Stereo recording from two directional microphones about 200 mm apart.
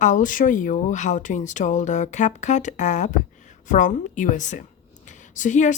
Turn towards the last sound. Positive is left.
turn(degrees=40)  # may be behind; listen again after turning